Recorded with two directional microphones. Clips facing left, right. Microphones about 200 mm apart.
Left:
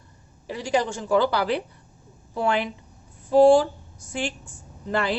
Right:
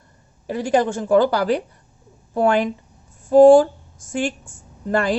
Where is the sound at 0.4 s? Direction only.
50° right (ahead or behind).